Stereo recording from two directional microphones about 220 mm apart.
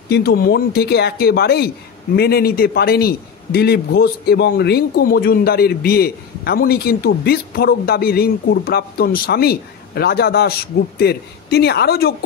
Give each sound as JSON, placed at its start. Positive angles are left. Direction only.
{"t": 0.1, "sound": "a man's voice", "side_deg": 45}